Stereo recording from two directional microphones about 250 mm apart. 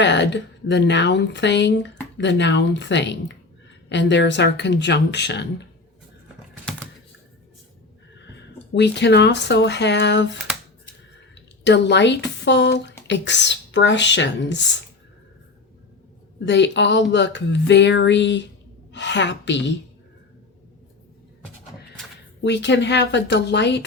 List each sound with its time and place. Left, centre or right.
0.0 s speech: left
8.3 s speech: left
11.6 s speech: left
16.5 s speech: left
22.4 s speech: left